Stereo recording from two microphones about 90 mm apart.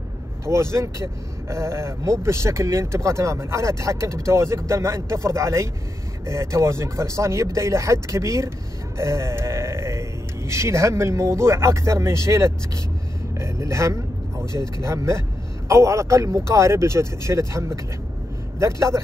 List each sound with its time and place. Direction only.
0.5 s speech: 30° right (ahead or behind)